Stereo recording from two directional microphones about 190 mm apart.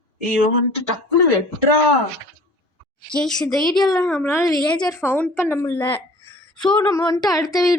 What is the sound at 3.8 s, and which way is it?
A woman's voice, 15° left (ahead or behind).